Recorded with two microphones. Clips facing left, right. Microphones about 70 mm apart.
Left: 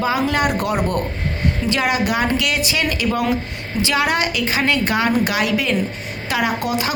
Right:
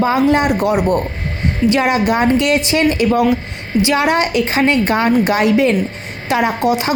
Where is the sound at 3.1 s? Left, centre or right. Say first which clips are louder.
Right 6 dB; centre.